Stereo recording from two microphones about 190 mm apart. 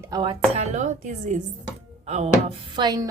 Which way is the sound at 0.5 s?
35° right (ahead or behind).